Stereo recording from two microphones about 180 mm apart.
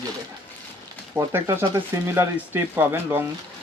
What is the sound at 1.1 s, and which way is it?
Speech, 15° right (ahead or behind).